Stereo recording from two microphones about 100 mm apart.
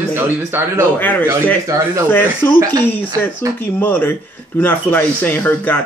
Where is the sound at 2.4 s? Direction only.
25° left (ahead or behind).